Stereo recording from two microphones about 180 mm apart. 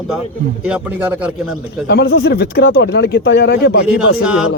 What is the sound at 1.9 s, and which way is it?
Speech, 65° left (ahead or behind).